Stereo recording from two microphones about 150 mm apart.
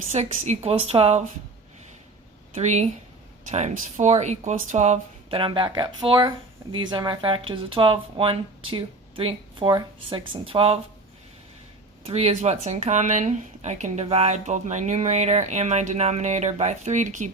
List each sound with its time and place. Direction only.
0.1 s speech: 50° right (ahead or behind)
2.6 s speech: 50° right (ahead or behind)
12.0 s speech: 45° right (ahead or behind)